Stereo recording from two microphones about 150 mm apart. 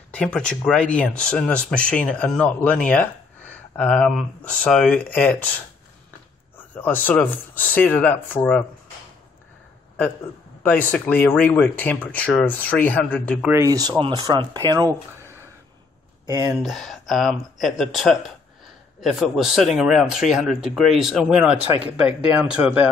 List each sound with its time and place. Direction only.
0.1 s speech: 5° left (ahead or behind)
6.7 s speech: 10° left (ahead or behind)
10.6 s speech: 10° left (ahead or behind)
13.5 s speech: 20° right (ahead or behind)
16.6 s speech: centre (ahead or behind)